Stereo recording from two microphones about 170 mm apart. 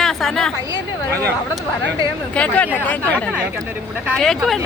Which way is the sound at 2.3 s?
5° left (ahead or behind).